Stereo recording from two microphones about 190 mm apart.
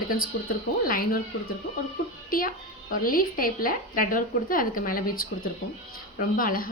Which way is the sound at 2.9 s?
50° left (ahead or behind).